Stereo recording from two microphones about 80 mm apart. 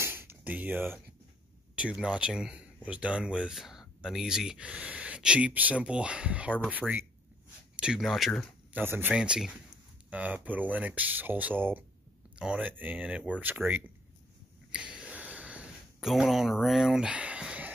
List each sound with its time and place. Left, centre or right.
0.0 s a sound: right
2.0 s speech: centre
7.7 s a sound: centre
8.0 s speech: centre
8.7 s speech: right
9.1 s speech: centre
12.4 s speech: centre
14.7 s sniff: centre
16.0 s speech: centre
17.1 s a sound: centre